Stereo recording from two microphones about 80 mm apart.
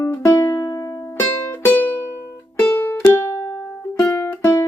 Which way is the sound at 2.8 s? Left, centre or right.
Left.